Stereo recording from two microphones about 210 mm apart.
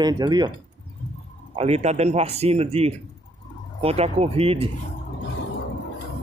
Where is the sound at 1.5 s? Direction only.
30° right (ahead or behind).